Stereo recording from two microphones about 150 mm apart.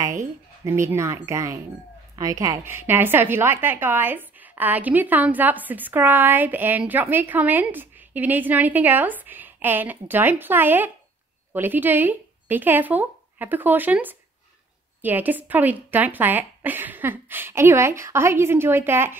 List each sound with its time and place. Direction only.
0.0 s a woman's voice: 20° right (ahead or behind)